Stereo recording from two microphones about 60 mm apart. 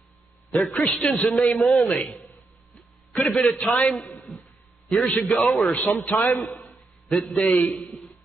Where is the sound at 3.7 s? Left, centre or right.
Left.